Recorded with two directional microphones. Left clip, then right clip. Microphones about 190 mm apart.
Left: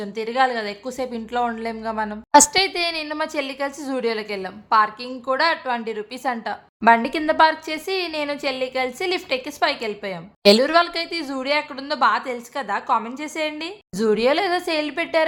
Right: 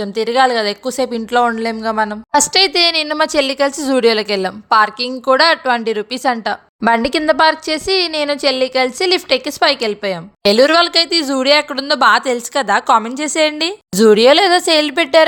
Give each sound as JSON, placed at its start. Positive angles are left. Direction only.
{"t": 0.0, "sound": "a woman's voice", "side_deg": -40}